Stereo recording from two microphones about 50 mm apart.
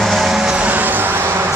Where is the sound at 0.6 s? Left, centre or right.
Right.